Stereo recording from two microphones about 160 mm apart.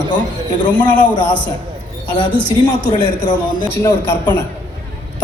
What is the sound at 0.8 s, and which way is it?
Speech, 30° left (ahead or behind).